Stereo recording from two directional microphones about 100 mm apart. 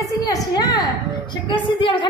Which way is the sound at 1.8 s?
55° left (ahead or behind).